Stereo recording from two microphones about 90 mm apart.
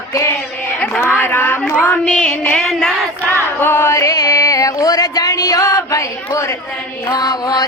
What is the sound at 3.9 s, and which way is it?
Music, 35° left (ahead or behind).